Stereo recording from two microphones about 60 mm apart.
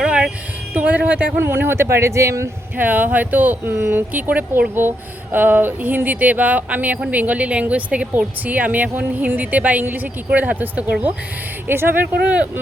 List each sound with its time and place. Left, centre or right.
0.0 s music: centre
0.7 s a woman's voice: right
1.4 s speech: right
2.7 s a woman's voice: right
11.7 s speech: right
12.2 s a woman's voice: right